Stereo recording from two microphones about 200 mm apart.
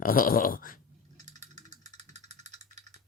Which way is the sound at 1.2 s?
35° right (ahead or behind).